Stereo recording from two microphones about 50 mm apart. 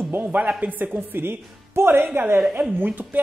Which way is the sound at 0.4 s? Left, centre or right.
Right.